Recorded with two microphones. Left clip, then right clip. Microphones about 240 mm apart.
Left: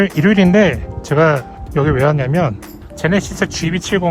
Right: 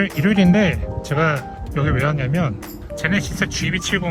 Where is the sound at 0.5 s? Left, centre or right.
Left.